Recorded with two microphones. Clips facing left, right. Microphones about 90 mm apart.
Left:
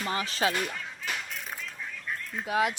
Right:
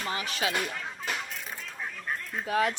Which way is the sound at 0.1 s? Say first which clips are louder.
Left 3 dB; 35° left (ahead or behind).